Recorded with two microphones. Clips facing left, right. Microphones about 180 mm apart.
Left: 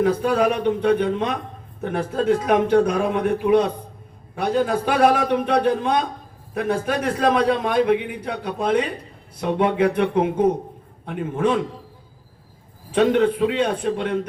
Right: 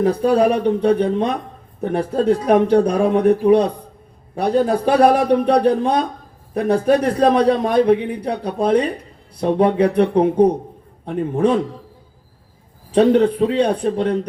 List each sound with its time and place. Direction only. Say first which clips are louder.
0.0 s a man's voice: right 4 dB; 35° right (ahead or behind)
12.9 s a man's voice: right 4 dB; 35° right (ahead or behind)